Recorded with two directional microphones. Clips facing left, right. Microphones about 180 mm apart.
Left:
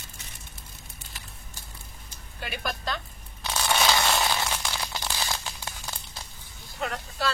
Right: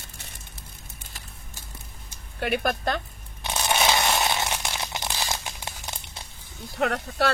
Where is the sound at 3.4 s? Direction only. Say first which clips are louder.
Right 1 dB; 20° right (ahead or behind).